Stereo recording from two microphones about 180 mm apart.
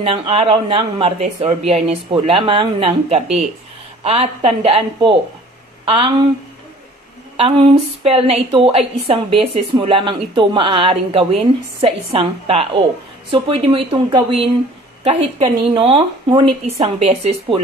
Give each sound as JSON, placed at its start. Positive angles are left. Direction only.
{"t": 0.0, "sound": "a woman's voice", "side_deg": -30}
{"t": 7.3, "sound": "a woman's voice", "side_deg": -30}